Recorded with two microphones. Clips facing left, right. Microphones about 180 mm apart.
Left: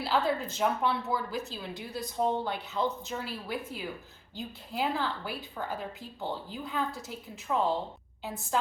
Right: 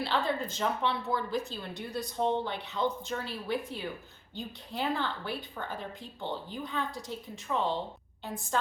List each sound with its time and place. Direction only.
0.0 s a woman's voice: 5° left (ahead or behind)